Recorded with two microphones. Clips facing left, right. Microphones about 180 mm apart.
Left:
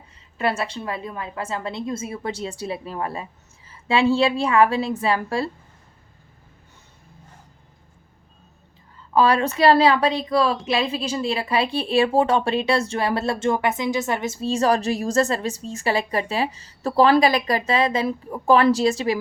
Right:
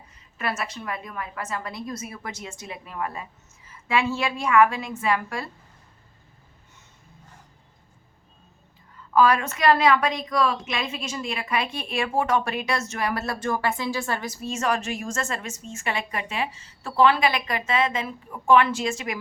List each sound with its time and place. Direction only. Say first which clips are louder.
0.3 s a woman's voice: left 6 dB; 30° left (ahead or behind)
9.1 s a woman's voice: left 2 dB; 30° left (ahead or behind)